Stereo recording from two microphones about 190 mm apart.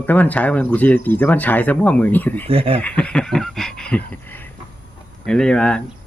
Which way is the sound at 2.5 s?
30° right (ahead or behind).